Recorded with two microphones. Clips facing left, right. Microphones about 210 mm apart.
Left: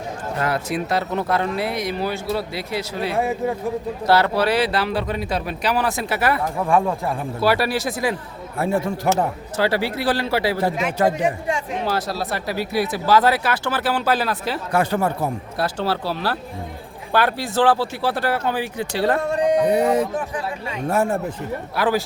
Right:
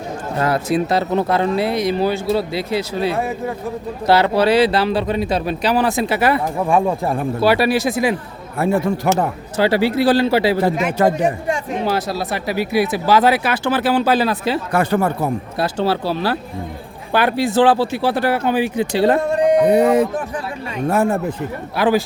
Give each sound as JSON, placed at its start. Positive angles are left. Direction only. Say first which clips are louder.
{"t": 0.3, "sound": "speech", "louder": "right 6 dB", "side_deg": -35}
{"t": 3.2, "sound": "speech", "louder": "left 1 dB", "side_deg": 15}
{"t": 4.0, "sound": "speech", "louder": "right 4 dB", "side_deg": -20}
{"t": 8.5, "sound": "a man's voice", "louder": "right 4 dB", "side_deg": -70}
{"t": 9.6, "sound": "speech", "louder": "right 6 dB", "side_deg": -25}
{"t": 10.8, "sound": "speech", "louder": "right 3 dB", "side_deg": -55}
{"t": 11.9, "sound": "speech", "louder": "right 3 dB", "side_deg": -15}
{"t": 14.7, "sound": "speech", "louder": "right 1 dB", "side_deg": -60}
{"t": 15.5, "sound": "speech", "louder": "right 4 dB", "side_deg": -15}
{"t": 19.5, "sound": "a man's voice", "louder": "right 5 dB", "side_deg": -60}
{"t": 21.8, "sound": "speech", "louder": "right 5 dB", "side_deg": -15}